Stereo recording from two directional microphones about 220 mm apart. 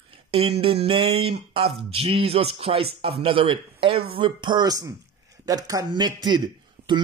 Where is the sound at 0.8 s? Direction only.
25° right (ahead or behind).